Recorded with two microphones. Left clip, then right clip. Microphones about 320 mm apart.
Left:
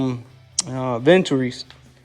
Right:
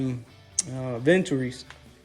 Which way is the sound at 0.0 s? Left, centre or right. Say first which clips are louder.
Left 7 dB; centre.